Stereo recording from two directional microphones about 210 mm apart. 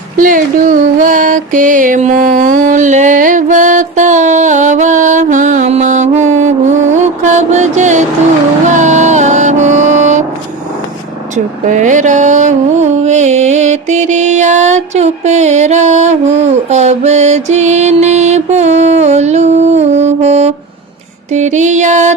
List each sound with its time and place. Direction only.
0.2 s music: 40° right (ahead or behind)
11.6 s mantra: 35° right (ahead or behind)
21.3 s music: 35° right (ahead or behind)